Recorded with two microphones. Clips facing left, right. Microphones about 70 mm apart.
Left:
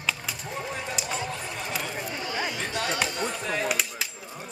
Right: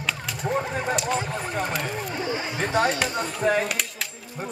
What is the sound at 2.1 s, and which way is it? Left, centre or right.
Chatter, right.